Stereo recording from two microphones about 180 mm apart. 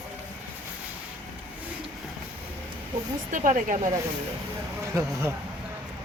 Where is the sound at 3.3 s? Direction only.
45° right (ahead or behind).